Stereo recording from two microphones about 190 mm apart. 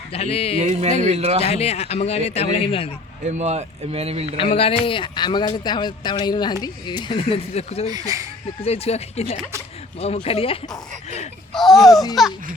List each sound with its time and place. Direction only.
0.1 s a man's voice: 30° left (ahead or behind)
0.6 s speech: 35° right (ahead or behind)
1.5 s a man's voice: 35° left (ahead or behind)
3.2 s speech: 35° right (ahead or behind)
4.4 s speech: 30° left (ahead or behind)
7.9 s speech: 20° right (ahead or behind)
8.6 s a man's voice: 35° left (ahead or behind)
11.5 s speech: centre (ahead or behind)